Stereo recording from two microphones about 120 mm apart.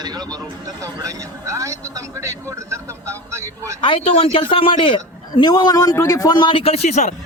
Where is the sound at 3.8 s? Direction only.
50° left (ahead or behind); by 7.1 s 75° left (ahead or behind).